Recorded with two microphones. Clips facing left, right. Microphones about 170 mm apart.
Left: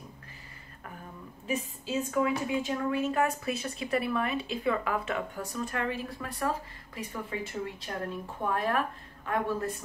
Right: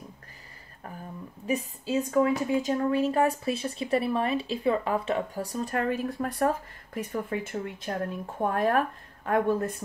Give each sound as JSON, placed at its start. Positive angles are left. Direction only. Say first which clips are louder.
{"t": 1.5, "sound": "a woman's voice", "louder": "right 4 dB", "side_deg": -40}
{"t": 8.4, "sound": "speech", "louder": "right 5 dB", "side_deg": -45}